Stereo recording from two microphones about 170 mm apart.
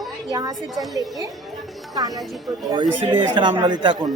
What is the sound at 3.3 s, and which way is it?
Speech, 25° right (ahead or behind).